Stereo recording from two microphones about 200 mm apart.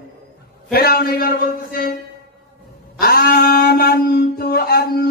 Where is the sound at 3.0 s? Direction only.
50° left (ahead or behind).